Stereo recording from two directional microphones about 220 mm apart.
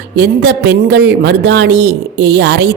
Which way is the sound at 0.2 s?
50° right (ahead or behind).